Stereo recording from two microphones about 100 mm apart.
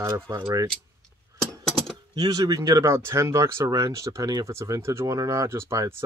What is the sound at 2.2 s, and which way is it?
Speech, 35° right (ahead or behind).